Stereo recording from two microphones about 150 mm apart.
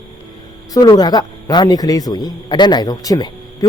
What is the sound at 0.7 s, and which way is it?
A man's voice, 25° left (ahead or behind).